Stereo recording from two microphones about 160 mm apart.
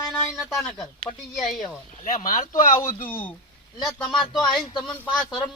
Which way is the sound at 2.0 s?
55° left (ahead or behind).